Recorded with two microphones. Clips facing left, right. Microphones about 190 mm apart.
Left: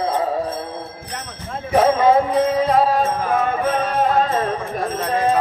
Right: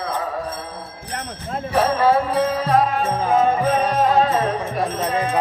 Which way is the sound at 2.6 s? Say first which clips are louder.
Left 2 dB; 35° left (ahead or behind).